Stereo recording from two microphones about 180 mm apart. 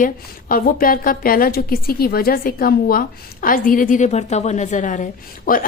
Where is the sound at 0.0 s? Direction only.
50° left (ahead or behind).